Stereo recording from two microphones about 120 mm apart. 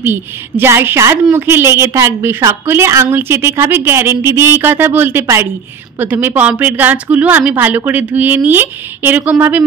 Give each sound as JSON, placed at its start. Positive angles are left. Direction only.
{"t": 0.0, "sound": "a woman's voice", "side_deg": -20}